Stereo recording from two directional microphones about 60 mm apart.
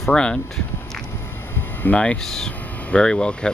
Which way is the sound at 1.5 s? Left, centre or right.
Left.